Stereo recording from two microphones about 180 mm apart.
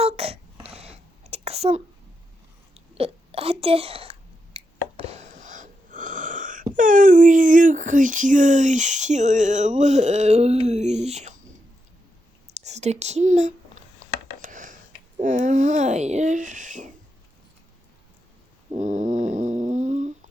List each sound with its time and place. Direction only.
0.0 s a sound: 35° right (ahead or behind)
6.7 s speech: 50° right (ahead or behind)
12.5 s speech: 40° right (ahead or behind)
14.4 s a sound: 45° right (ahead or behind)
15.2 s speech: 45° right (ahead or behind)
18.7 s snoring: 40° right (ahead or behind)